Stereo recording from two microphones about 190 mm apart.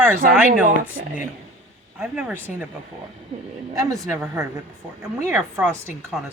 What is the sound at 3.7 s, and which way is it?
Speech, 15° right (ahead or behind).